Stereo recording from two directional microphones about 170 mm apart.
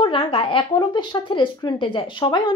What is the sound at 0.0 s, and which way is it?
A woman's voice, 30° left (ahead or behind).